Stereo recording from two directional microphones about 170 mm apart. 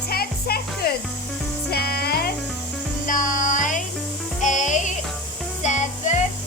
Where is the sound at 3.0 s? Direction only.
50° left (ahead or behind).